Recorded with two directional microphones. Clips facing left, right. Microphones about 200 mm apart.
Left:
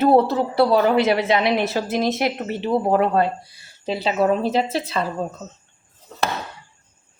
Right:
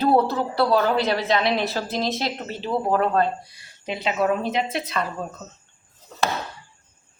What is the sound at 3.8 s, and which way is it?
Speech, 30° left (ahead or behind).